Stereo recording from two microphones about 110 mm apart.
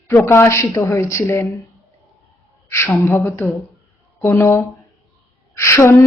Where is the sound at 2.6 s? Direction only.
20° left (ahead or behind).